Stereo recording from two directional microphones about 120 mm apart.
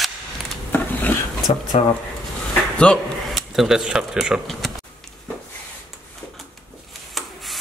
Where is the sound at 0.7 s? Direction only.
15° left (ahead or behind).